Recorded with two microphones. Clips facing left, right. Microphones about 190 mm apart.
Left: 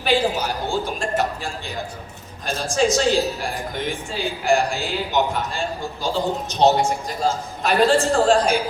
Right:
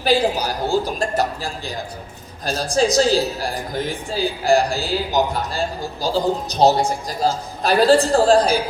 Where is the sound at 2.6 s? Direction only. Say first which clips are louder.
Right 3 dB; 35° right (ahead or behind).